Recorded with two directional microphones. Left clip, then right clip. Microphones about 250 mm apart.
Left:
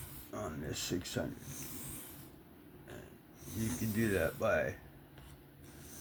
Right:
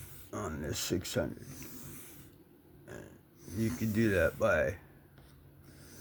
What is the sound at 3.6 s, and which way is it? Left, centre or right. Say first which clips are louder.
Speech: right 4 dB; right.